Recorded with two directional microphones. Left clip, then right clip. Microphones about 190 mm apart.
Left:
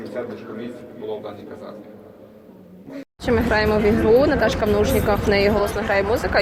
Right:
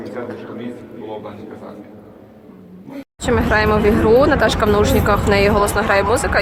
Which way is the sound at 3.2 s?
25° left (ahead or behind).